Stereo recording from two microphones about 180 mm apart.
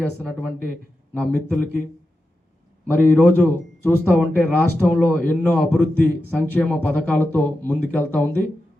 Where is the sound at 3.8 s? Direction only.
10° left (ahead or behind).